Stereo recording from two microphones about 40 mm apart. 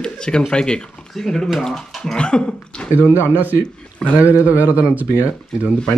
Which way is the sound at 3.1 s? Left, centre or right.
Left.